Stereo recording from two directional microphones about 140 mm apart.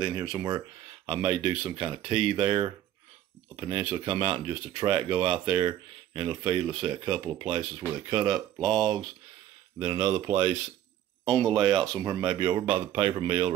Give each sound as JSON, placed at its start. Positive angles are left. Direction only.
{"t": 0.0, "sound": "speech", "side_deg": -25}
{"t": 1.0, "sound": "speech", "side_deg": -35}
{"t": 11.7, "sound": "speech", "side_deg": 5}
{"t": 12.0, "sound": "speech", "side_deg": -30}